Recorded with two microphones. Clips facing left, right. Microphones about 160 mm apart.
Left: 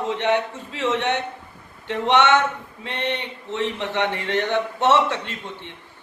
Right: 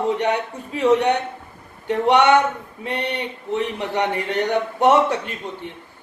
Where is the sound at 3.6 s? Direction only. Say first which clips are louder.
Even; 10° right (ahead or behind).